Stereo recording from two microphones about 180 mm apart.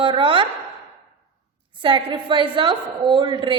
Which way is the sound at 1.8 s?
25° right (ahead or behind).